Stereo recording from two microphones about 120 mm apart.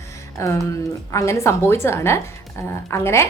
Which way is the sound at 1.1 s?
25° left (ahead or behind).